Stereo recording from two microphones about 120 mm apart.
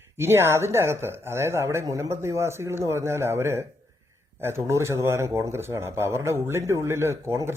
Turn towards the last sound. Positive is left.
turn(degrees=-20)  # may be behind; listen again after turning